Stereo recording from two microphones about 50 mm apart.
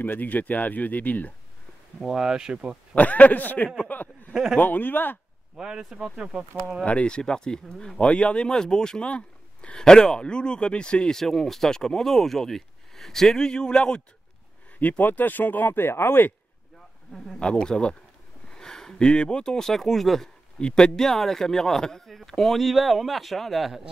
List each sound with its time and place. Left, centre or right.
0.0 s speech: left
2.0 s speech: centre
2.9 s speech: left
4.3 s speech: centre
4.6 s speech: left
5.6 s speech: centre
6.8 s speech: left
9.8 s speech: centre
14.8 s speech: left
17.4 s speech: centre
20.6 s speech: centre